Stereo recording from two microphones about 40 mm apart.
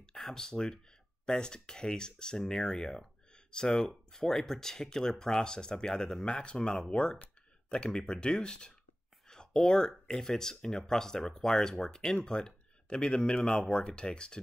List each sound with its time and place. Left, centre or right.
0.0 s speech: centre